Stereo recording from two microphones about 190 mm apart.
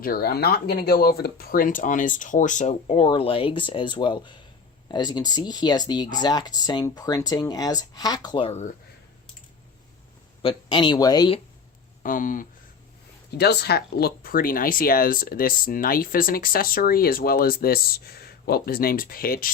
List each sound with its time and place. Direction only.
0.0 s speech: 50° left (ahead or behind); by 8.7 s 35° left (ahead or behind)
10.4 s speech: 25° left (ahead or behind)
12.0 s speech: 45° left (ahead or behind)
13.3 s speech: 60° left (ahead or behind)